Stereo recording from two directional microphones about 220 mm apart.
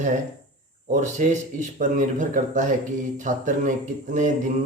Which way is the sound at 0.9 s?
35° right (ahead or behind).